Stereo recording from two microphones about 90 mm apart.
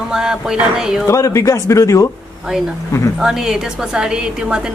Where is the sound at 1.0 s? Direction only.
35° left (ahead or behind).